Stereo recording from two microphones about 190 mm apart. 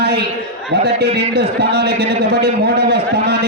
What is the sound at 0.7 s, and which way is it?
A man's voice, 60° right (ahead or behind).